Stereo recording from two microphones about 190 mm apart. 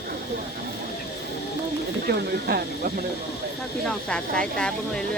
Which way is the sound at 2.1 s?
55° right (ahead or behind).